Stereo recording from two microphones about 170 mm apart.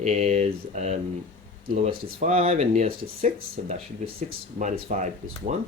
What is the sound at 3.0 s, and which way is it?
Speech, 60° right (ahead or behind).